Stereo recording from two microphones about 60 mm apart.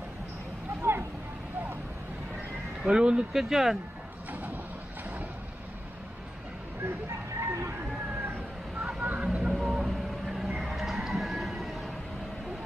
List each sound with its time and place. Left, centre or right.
0.8 s vehicle: right
2.8 s speech: centre
6.8 s vehicle: right
8.2 s vehicle: right
9.5 s vehicle: centre
10.6 s a sound: centre